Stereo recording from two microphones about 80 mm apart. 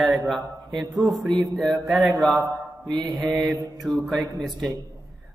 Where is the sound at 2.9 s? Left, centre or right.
Right.